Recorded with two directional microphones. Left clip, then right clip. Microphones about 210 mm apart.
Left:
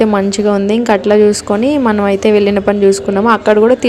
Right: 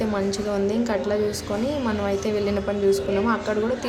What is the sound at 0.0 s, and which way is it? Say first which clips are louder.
A woman's voice: left 13 dB; 35° left (ahead or behind).